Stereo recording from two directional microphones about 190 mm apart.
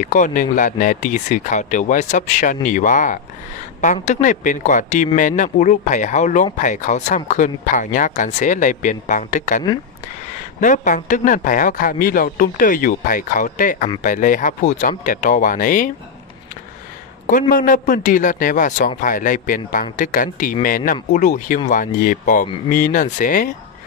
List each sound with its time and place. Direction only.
0.0 s a man's voice: 40° left (ahead or behind)
10.6 s a man's voice: 40° left (ahead or behind)
17.3 s a man's voice: 45° left (ahead or behind)